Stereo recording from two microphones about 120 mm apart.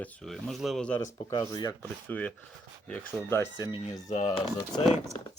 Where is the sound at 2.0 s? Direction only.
10° left (ahead or behind).